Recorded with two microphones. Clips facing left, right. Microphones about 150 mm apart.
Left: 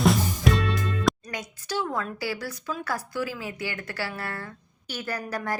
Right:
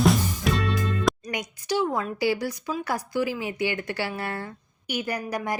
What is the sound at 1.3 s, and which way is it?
A woman's voice, 15° right (ahead or behind).